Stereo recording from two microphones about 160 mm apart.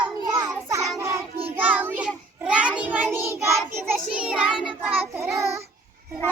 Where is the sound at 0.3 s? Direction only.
20° right (ahead or behind).